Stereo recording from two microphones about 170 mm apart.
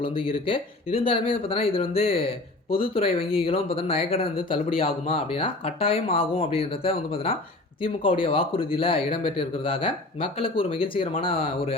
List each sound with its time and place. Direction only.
0.0 s speech: 30° left (ahead or behind)